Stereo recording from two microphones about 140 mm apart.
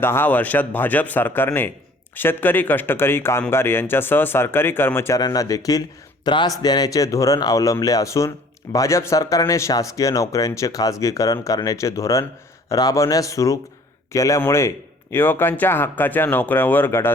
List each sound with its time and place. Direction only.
0.0 s speech: 15° left (ahead or behind)